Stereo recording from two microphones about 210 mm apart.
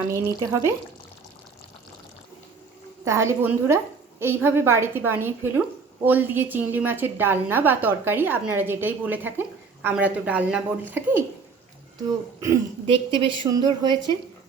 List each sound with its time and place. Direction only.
0.1 s a woman's voice: 15° right (ahead or behind)
3.0 s a woman's voice: 15° right (ahead or behind)
12.4 s a woman's voice: 20° right (ahead or behind)